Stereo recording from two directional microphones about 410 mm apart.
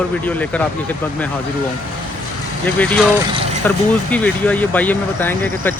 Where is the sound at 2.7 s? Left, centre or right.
Centre.